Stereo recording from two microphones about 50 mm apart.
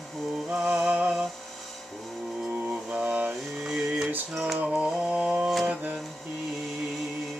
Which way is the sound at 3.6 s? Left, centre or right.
Centre.